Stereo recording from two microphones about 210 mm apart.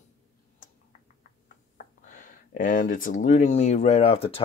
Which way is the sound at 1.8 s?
40° left (ahead or behind).